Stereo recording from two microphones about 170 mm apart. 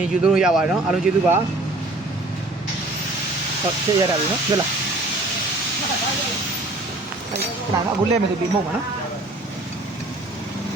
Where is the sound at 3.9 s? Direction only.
20° right (ahead or behind).